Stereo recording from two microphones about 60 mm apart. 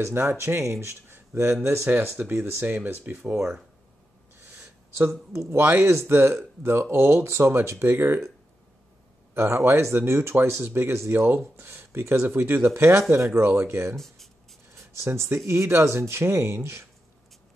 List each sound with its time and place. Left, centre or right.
0.0 s speech: right
2.4 s speech: right
3.2 s speech: centre
4.4 s a sound: right
5.3 s speech: right
9.3 s speech: right
13.9 s writing: centre
14.8 s speech: right